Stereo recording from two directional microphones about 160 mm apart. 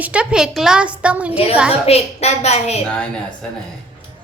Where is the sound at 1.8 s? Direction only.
40° left (ahead or behind).